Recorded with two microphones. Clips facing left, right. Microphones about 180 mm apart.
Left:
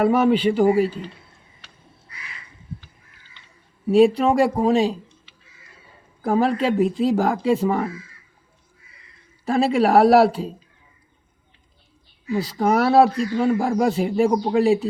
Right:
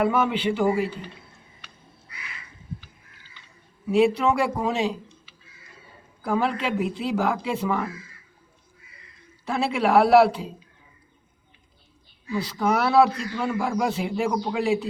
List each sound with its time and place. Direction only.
0.0 s speech: 40° left (ahead or behind)
3.9 s speech: 35° left (ahead or behind)
6.2 s speech: 40° left (ahead or behind)
9.4 s speech: 40° left (ahead or behind)
12.3 s speech: 45° left (ahead or behind)